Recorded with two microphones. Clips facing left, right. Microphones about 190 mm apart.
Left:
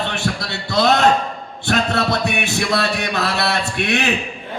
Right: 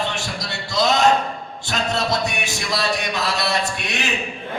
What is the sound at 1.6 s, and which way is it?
Music, 60° left (ahead or behind).